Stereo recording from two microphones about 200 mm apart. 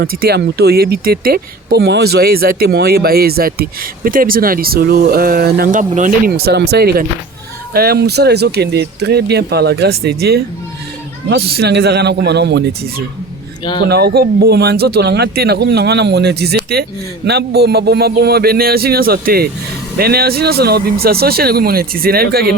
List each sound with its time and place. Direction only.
0.0 s speech: 50° right (ahead or behind)
13.8 s speech: 55° right (ahead or behind)